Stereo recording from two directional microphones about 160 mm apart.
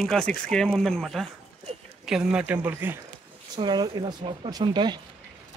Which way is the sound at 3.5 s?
25° right (ahead or behind).